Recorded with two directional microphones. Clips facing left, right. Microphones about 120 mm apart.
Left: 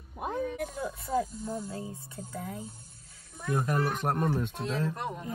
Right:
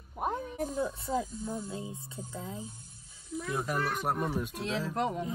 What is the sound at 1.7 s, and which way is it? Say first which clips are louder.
Speech: left 1 dB; 20° right (ahead or behind).